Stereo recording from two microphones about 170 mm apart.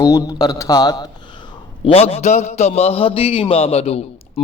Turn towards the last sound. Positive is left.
turn(degrees=35)  # may be behind; listen again after turning